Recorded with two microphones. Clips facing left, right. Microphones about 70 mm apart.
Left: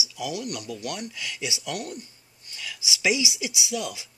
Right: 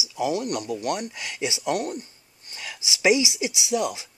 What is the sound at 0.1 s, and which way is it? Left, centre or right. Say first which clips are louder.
Speech: right 8 dB; right.